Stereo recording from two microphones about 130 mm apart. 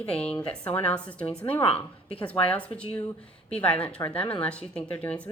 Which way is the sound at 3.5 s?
10° left (ahead or behind).